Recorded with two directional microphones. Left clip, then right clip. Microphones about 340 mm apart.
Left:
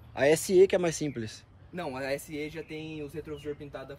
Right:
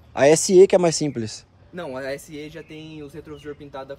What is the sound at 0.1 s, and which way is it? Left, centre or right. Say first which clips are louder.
Speech: right 9 dB; centre.